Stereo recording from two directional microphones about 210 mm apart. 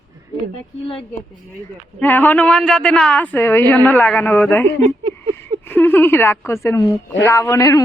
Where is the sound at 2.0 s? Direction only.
10° left (ahead or behind).